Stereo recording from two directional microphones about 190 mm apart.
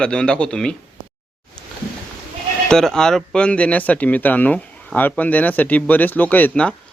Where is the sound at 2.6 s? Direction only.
5° left (ahead or behind).